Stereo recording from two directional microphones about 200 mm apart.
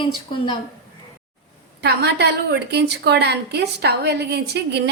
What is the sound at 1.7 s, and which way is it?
A woman's voice, 55° right (ahead or behind).